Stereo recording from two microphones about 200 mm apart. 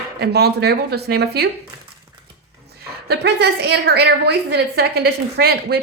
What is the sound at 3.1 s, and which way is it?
A woman's voice, 55° right (ahead or behind).